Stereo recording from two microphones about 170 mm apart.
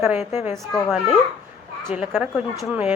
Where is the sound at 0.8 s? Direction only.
5° right (ahead or behind).